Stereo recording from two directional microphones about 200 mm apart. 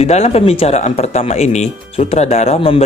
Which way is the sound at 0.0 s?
35° left (ahead or behind).